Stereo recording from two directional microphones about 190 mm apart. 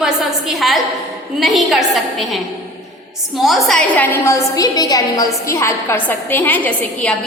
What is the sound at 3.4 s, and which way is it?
A woman's voice, centre (ahead or behind).